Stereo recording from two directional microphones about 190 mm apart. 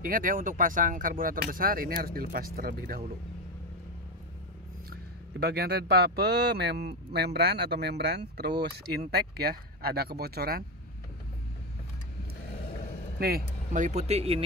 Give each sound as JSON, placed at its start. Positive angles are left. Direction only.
{"t": 0.0, "sound": "speech", "side_deg": -45}
{"t": 5.4, "sound": "speech", "side_deg": -55}
{"t": 13.2, "sound": "speech", "side_deg": -45}